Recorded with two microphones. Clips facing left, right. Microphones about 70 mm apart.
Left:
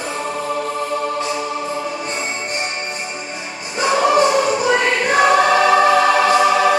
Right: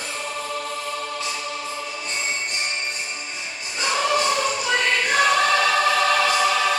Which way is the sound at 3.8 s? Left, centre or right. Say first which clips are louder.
Left 8 dB; left.